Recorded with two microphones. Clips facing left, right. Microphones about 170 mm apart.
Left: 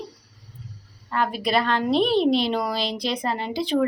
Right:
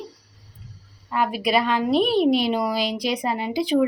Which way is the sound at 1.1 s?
10° right (ahead or behind).